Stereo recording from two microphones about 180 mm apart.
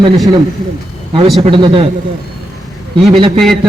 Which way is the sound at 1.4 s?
30° right (ahead or behind).